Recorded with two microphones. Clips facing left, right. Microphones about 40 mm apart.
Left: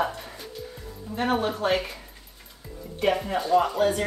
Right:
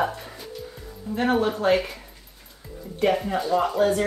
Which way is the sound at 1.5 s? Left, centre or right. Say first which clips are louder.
Right 4 dB; centre.